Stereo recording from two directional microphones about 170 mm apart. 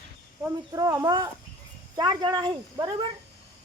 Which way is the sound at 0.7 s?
20° right (ahead or behind).